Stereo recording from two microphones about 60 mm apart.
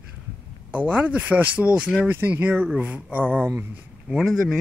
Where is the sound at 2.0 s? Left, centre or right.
Right.